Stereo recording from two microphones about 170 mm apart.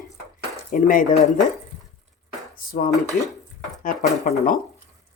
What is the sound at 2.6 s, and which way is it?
Speech, 55° left (ahead or behind).